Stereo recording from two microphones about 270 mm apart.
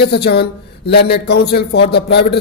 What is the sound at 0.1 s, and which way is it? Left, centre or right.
A man's voice, left.